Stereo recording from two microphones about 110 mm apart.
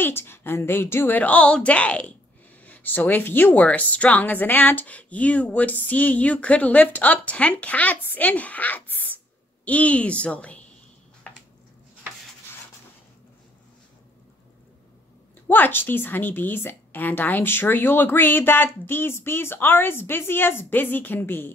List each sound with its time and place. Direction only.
0.0 s a woman's voice: 20° left (ahead or behind)
15.4 s a woman's voice: 15° left (ahead or behind)